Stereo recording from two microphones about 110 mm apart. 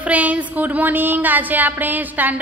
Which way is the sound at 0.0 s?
10° right (ahead or behind).